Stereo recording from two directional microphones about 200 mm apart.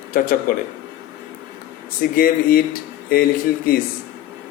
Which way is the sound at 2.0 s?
45° left (ahead or behind).